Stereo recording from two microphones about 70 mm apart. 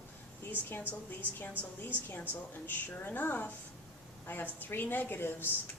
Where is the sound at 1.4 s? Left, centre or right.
Left.